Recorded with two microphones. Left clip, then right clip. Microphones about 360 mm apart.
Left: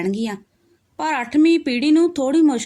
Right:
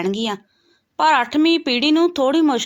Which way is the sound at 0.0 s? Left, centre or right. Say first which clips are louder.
Right 2 dB; left.